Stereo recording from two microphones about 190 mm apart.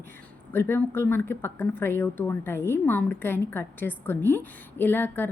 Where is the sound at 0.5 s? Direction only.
10° left (ahead or behind).